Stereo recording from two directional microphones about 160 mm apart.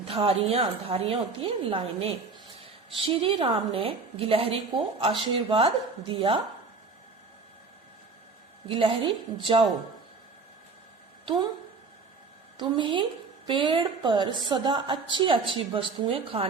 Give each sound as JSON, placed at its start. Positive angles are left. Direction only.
{"t": 0.1, "sound": "a woman's voice", "side_deg": -35}
{"t": 8.6, "sound": "a woman's voice", "side_deg": -35}
{"t": 12.5, "sound": "a woman's voice", "side_deg": -30}